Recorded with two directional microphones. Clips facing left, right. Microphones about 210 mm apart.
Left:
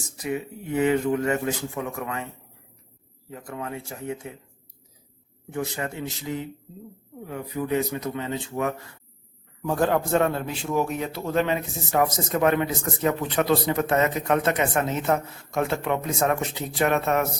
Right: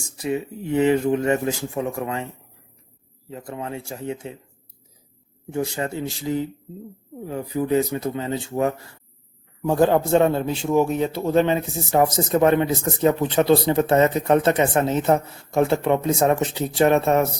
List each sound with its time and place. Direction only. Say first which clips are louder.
0.0 s a man's voice: right 4 dB; 30° right (ahead or behind)
5.5 s a man's voice: right 4 dB; 25° right (ahead or behind)